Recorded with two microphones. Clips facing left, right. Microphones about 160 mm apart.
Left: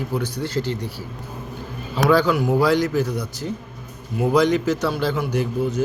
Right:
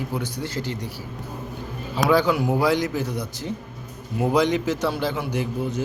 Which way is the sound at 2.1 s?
20° right (ahead or behind).